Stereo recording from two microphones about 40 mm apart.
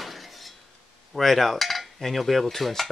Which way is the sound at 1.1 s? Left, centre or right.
Centre.